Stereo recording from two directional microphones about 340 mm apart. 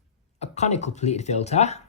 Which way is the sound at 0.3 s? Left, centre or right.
Centre.